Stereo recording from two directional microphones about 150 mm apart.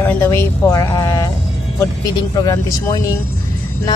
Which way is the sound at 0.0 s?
15° left (ahead or behind).